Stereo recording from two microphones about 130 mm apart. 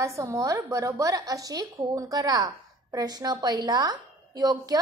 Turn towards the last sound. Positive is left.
turn(degrees=-30)  # may be behind; listen again after turning